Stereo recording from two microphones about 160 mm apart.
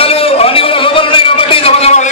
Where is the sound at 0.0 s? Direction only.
35° left (ahead or behind).